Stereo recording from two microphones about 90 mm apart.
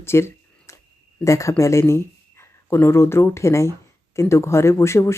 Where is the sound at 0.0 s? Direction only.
30° left (ahead or behind).